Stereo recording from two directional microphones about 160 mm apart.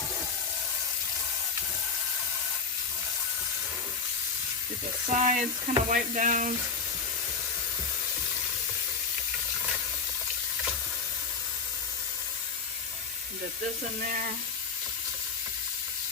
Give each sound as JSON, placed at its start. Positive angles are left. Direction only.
{"t": 5.1, "sound": "sizzle", "side_deg": -50}